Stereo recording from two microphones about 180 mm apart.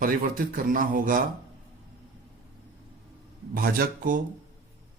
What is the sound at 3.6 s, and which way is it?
Speech, 55° right (ahead or behind).